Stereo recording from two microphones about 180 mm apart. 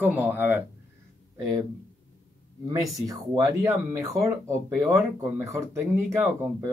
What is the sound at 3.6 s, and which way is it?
Speech, 15° right (ahead or behind).